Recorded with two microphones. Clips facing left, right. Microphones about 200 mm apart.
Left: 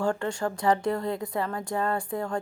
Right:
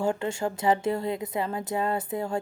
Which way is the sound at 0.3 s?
25° right (ahead or behind).